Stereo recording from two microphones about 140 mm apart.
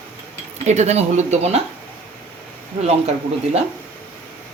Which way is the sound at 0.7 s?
55° right (ahead or behind).